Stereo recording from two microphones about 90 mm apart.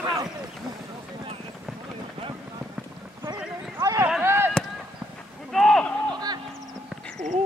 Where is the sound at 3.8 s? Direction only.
40° right (ahead or behind).